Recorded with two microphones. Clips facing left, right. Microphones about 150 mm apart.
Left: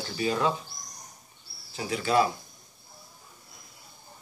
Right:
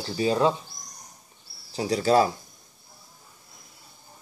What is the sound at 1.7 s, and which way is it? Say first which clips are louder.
Speech: right 4 dB; 35° right (ahead or behind).